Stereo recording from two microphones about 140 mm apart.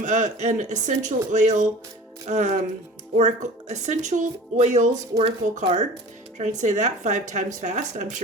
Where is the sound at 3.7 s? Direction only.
60° right (ahead or behind).